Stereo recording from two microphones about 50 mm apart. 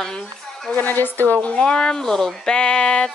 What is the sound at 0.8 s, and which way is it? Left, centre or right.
Speech, left.